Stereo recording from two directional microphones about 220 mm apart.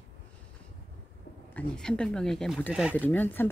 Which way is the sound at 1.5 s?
5° left (ahead or behind).